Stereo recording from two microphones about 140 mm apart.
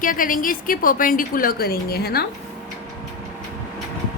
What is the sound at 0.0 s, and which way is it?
A woman's voice, 80° left.